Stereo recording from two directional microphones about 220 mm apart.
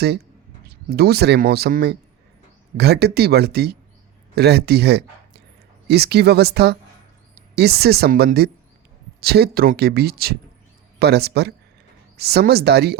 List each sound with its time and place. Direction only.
0.7 s speech: 45° right (ahead or behind)